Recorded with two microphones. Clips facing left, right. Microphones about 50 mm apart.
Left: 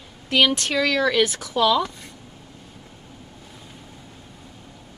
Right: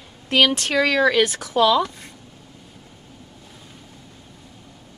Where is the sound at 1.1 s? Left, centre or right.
Centre.